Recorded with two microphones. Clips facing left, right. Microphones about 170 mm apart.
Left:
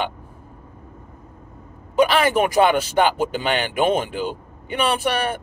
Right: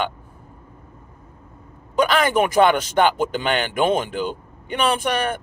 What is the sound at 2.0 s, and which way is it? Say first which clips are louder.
Speech: left 1 dB; 10° left (ahead or behind).